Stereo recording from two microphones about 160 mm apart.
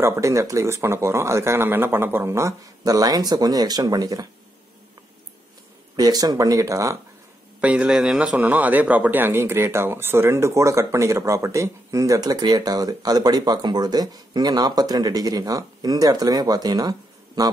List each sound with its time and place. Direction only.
0.0 s a man's voice: 15° right (ahead or behind)
5.9 s a man's voice: 25° right (ahead or behind)
7.6 s a man's voice: 10° right (ahead or behind); by 17.5 s 25° right (ahead or behind)